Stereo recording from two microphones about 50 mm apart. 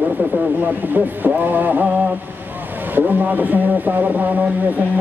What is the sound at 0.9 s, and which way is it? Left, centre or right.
Speech, right.